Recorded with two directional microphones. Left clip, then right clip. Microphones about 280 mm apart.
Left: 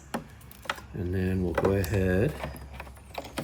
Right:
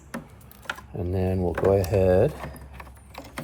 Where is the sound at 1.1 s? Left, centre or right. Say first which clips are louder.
Right 5 dB; centre.